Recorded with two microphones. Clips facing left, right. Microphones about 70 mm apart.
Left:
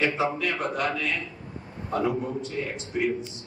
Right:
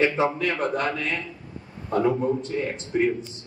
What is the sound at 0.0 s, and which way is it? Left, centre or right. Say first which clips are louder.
Speech: right 3 dB; right.